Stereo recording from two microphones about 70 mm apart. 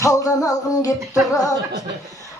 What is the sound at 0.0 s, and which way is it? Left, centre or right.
Music, left.